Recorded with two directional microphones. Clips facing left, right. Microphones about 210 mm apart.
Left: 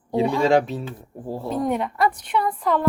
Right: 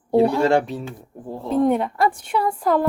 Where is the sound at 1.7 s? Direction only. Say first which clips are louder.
Right 2 dB; 30° right (ahead or behind).